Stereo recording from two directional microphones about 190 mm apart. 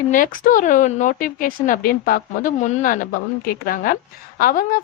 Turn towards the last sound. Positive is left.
turn(degrees=45)  # may be behind; listen again after turning